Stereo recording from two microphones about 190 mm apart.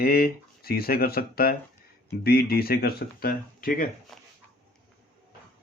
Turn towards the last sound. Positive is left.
turn(degrees=0)  # may be behind; listen again after turning